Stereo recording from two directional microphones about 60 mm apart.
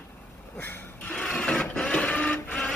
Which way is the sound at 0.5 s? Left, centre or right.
Left.